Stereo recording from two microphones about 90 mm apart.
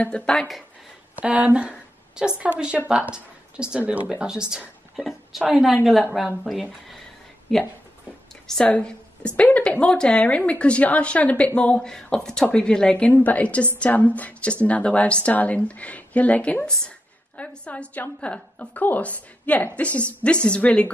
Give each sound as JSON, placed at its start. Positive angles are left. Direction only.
{"t": 0.0, "sound": "a woman's voice", "side_deg": 10}
{"t": 1.2, "sound": "a woman's voice", "side_deg": -15}